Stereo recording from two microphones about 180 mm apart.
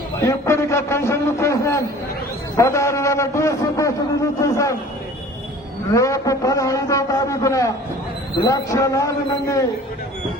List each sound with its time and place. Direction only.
0.2 s a man's voice: 15° left (ahead or behind)
2.6 s a sound: 15° left (ahead or behind)
5.9 s a man's voice: 15° left (ahead or behind)